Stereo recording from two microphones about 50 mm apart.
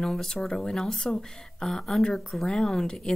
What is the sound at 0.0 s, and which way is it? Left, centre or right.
Speech, centre.